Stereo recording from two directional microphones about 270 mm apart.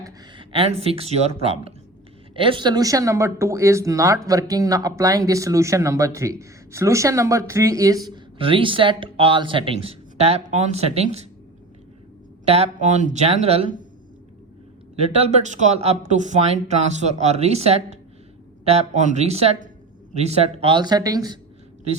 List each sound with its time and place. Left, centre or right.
0.0 s speech: centre
12.5 s speech: right
14.9 s speech: right